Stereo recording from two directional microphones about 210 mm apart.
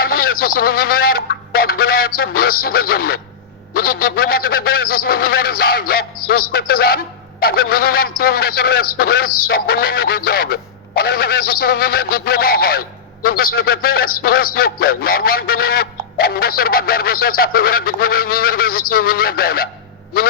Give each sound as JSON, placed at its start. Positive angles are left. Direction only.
{"t": 0.0, "sound": "a man's voice", "side_deg": 45}